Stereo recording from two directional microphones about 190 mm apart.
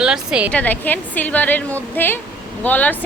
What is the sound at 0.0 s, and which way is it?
Speech, 5° right (ahead or behind).